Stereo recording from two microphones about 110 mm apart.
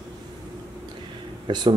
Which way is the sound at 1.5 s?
45° right (ahead or behind).